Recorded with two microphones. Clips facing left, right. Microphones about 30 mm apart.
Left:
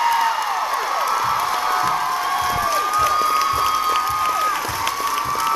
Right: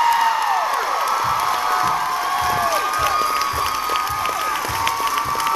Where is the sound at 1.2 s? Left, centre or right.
Centre.